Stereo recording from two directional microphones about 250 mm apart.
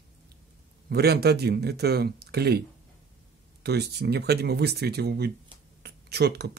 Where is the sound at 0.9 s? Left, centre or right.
Right.